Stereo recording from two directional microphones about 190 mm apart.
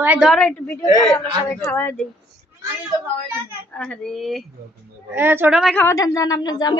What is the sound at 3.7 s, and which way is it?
Speech, 5° left (ahead or behind).